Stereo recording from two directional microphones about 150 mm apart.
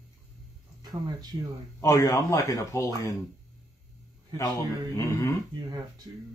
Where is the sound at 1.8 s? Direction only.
20° left (ahead or behind).